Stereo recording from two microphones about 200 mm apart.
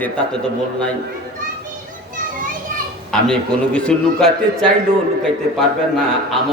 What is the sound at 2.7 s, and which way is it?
Children playing, 45° right (ahead or behind).